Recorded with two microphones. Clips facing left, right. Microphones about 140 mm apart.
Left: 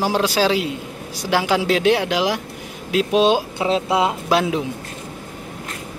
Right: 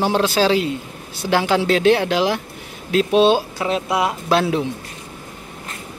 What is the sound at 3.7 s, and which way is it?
Speech, 25° left (ahead or behind).